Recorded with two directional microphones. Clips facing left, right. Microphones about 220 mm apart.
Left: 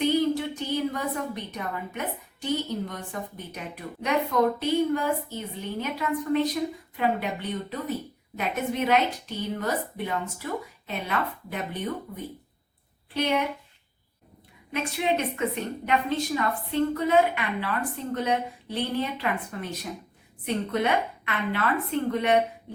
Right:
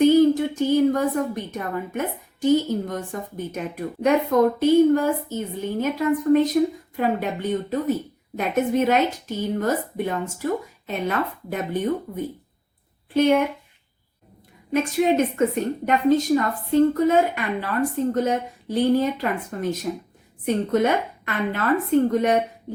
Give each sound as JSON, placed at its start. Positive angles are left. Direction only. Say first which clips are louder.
{"t": 0.0, "sound": "a woman's voice", "louder": "right 8 dB", "side_deg": -45}
{"t": 14.7, "sound": "a woman's voice", "louder": "right 7 dB", "side_deg": -45}